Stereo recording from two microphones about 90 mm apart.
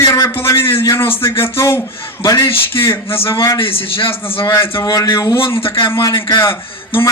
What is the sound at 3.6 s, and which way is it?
Speech, 85° left.